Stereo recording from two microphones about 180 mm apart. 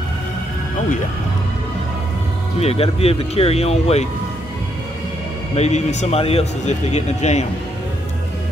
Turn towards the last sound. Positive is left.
turn(degrees=40)  # may be behind; listen again after turning